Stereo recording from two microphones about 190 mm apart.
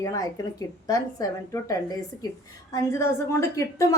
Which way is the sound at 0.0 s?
15° left (ahead or behind).